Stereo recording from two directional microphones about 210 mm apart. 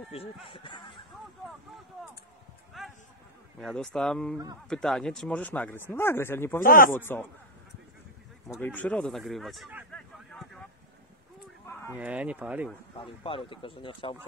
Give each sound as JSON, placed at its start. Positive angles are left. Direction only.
{"t": 0.1, "sound": "speech", "side_deg": 30}
{"t": 2.8, "sound": "speech", "side_deg": 0}
{"t": 6.6, "sound": "speech", "side_deg": 40}
{"t": 6.9, "sound": "speech", "side_deg": 10}
{"t": 8.5, "sound": "speech", "side_deg": 10}
{"t": 9.9, "sound": "a sound", "side_deg": 5}
{"t": 11.6, "sound": "fowl", "side_deg": 10}
{"t": 11.9, "sound": "speech", "side_deg": -5}
{"t": 12.9, "sound": "speech", "side_deg": 25}